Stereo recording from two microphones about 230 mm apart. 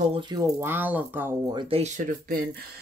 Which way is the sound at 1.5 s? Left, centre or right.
Right.